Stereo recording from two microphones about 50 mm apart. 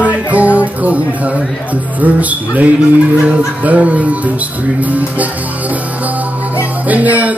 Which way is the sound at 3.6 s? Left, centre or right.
Right.